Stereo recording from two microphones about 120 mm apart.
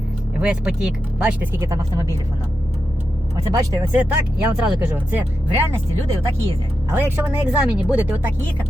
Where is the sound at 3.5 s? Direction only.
30° right (ahead or behind).